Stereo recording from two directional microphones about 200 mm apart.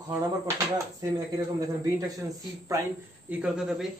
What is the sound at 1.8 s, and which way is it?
Speech, 15° right (ahead or behind).